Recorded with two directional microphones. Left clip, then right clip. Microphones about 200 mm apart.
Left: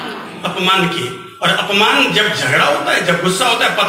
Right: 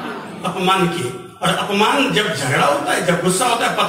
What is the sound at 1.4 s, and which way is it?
A man's voice, 55° right (ahead or behind).